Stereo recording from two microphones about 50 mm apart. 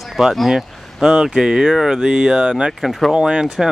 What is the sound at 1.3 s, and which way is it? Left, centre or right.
Speech, centre.